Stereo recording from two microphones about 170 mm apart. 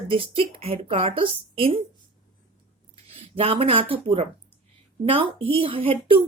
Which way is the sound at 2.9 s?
35° right (ahead or behind).